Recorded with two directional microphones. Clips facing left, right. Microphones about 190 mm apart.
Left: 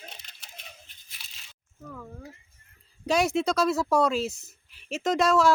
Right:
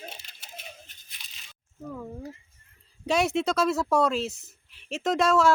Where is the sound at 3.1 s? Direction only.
Centre (ahead or behind).